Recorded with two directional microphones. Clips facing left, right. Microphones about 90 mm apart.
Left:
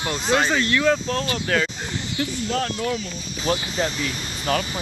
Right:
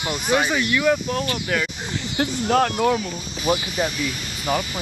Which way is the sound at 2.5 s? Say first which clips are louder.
Right 8 dB; 65° right (ahead or behind).